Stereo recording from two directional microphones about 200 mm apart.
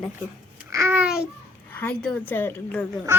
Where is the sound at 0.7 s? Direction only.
10° right (ahead or behind).